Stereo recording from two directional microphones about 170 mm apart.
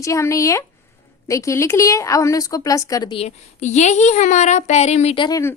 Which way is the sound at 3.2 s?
40° left (ahead or behind).